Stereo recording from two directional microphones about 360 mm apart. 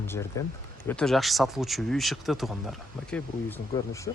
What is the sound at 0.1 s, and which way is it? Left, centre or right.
Speech, centre.